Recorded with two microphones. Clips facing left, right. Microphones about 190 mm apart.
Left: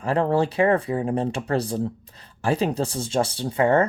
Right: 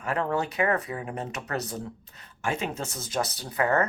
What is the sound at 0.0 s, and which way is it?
Speech, 30° left (ahead or behind).